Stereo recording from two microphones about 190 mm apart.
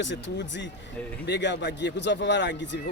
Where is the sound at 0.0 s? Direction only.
70° left (ahead or behind).